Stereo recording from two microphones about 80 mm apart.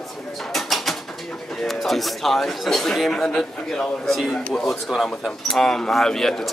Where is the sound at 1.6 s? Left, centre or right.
Centre.